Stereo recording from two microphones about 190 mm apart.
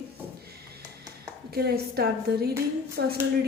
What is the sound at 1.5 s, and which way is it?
A woman's voice, 55° right (ahead or behind).